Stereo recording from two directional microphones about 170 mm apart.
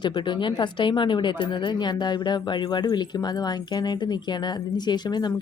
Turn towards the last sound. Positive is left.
turn(degrees=25)  # may be behind; listen again after turning